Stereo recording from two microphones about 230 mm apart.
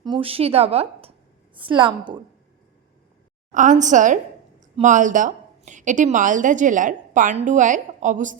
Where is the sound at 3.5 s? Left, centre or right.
Right.